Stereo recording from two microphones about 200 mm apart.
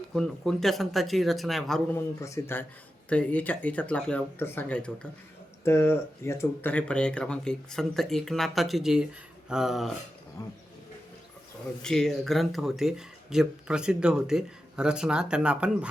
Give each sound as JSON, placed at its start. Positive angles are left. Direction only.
{"t": 0.1, "sound": "speech", "side_deg": 0}
{"t": 2.2, "sound": "speech", "side_deg": 15}
{"t": 10.4, "sound": "speech", "side_deg": 15}
{"t": 11.8, "sound": "speech", "side_deg": 5}